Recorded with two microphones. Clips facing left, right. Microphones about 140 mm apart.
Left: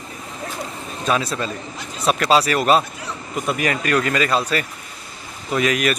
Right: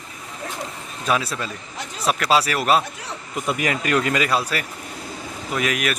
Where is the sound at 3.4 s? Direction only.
15° right (ahead or behind).